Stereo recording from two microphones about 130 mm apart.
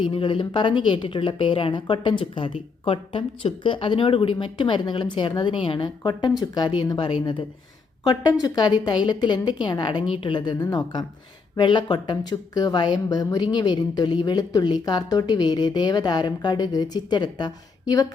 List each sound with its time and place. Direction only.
0.0 s a woman's voice: 40° left (ahead or behind)